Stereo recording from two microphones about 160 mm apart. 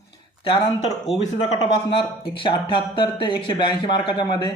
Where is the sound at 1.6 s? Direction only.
35° left (ahead or behind).